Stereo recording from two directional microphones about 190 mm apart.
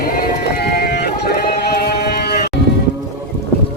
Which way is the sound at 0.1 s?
55° left (ahead or behind).